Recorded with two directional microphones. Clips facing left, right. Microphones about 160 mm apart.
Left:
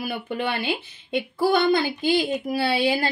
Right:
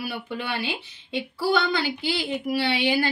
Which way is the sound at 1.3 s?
50° left (ahead or behind).